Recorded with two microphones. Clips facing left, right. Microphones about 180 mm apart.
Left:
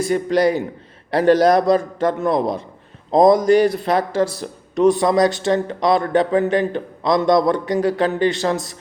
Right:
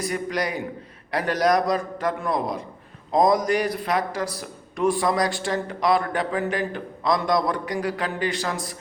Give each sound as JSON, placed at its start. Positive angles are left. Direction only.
{"t": 0.0, "sound": "speech", "side_deg": 30}